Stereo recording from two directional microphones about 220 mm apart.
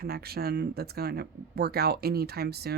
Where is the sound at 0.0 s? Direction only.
45° right (ahead or behind).